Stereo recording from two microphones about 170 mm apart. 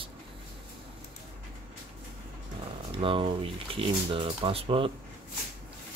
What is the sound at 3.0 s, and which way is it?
Speech, 30° right (ahead or behind).